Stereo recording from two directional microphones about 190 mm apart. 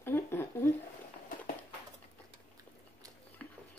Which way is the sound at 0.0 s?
10° left (ahead or behind).